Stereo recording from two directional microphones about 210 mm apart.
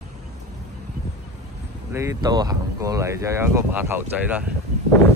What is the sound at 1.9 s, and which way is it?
Speech, 15° right (ahead or behind).